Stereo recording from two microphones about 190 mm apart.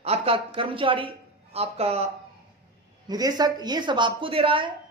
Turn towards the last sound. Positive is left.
turn(degrees=-30)  # may be behind; listen again after turning